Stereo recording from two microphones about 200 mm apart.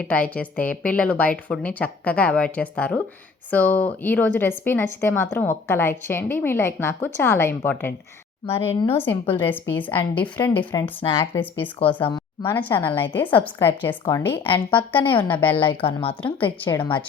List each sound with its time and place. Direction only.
0.0 s speech: 5° left (ahead or behind)
8.4 s a woman's voice: 30° left (ahead or behind)
9.0 s speech: 10° left (ahead or behind)
12.0 s a sound: 25° left (ahead or behind)
12.7 s speech: 10° left (ahead or behind)
14.8 s a woman's voice: 25° left (ahead or behind)
15.3 s speech: 10° left (ahead or behind)
15.5 s a woman's voice: 25° left (ahead or behind)